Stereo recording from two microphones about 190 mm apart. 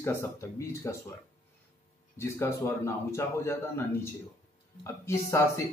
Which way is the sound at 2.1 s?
15° left (ahead or behind).